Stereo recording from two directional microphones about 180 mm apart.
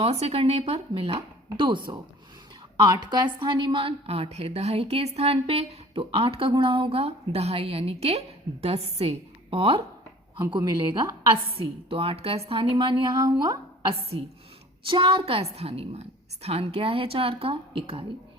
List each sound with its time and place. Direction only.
0.0 s a woman's voice: 35° right (ahead or behind)